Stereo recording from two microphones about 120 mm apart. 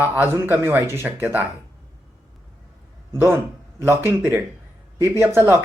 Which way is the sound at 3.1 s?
20° right (ahead or behind).